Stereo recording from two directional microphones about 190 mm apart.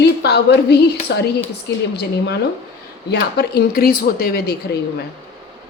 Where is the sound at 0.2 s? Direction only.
60° left (ahead or behind).